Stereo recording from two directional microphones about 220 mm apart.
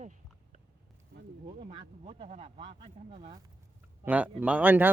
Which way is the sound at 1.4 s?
25° right (ahead or behind).